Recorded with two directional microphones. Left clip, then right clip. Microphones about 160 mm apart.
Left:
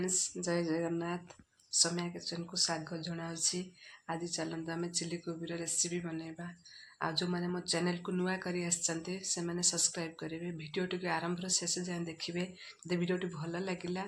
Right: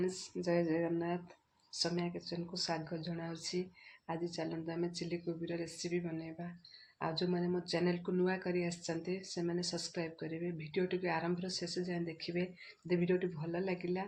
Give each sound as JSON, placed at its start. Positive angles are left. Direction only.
{"t": 0.1, "sound": "speech", "side_deg": 0}